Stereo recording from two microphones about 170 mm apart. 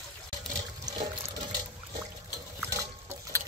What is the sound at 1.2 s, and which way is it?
Liquid, 25° right (ahead or behind).